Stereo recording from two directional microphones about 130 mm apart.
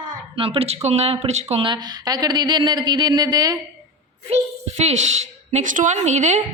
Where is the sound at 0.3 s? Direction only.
45° right (ahead or behind).